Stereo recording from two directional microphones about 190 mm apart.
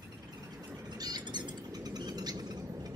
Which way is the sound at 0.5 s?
15° right (ahead or behind).